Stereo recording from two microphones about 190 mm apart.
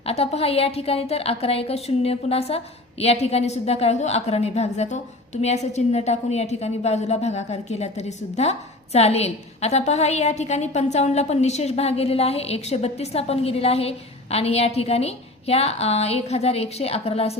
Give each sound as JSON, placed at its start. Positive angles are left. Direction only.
{"t": 0.0, "sound": "a woman's voice", "side_deg": 30}